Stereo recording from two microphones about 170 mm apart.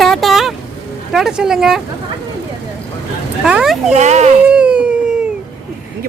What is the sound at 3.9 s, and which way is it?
Speech, 40° right (ahead or behind).